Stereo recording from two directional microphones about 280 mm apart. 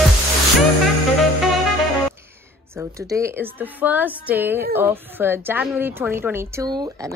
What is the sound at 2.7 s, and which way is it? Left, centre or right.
A woman's voice, centre.